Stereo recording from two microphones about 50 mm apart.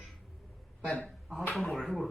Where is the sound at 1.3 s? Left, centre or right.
Centre.